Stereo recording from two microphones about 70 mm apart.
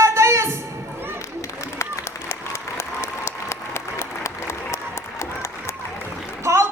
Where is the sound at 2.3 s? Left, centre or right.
Left.